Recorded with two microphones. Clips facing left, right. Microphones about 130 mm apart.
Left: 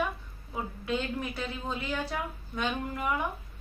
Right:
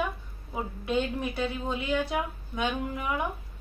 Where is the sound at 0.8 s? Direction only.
15° right (ahead or behind).